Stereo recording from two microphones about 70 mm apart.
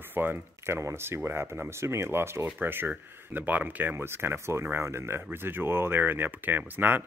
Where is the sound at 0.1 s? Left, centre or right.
Right.